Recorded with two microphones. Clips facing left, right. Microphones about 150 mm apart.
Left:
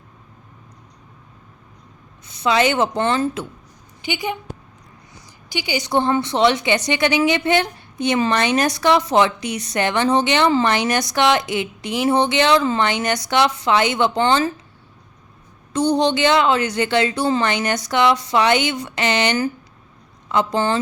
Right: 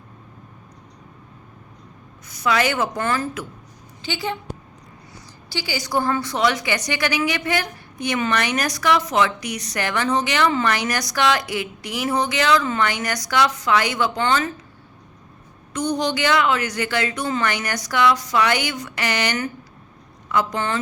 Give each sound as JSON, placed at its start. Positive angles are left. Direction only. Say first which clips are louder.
{"t": 2.2, "sound": "a woman's voice", "louder": "left 3 dB", "side_deg": 25}
{"t": 4.0, "sound": "a woman's voice", "louder": "left 2 dB", "side_deg": 15}
{"t": 5.5, "sound": "a woman's voice", "louder": "left 4 dB", "side_deg": 20}
{"t": 15.7, "sound": "a woman's voice", "louder": "left 5 dB", "side_deg": 30}